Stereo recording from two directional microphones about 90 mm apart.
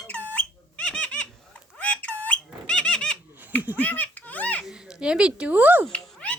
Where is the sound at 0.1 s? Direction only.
20° left (ahead or behind).